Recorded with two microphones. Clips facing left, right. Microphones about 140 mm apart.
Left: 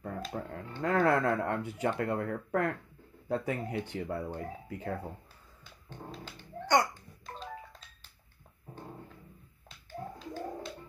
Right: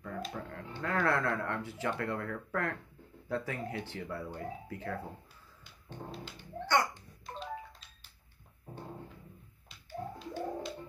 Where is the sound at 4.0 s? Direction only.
40° left (ahead or behind).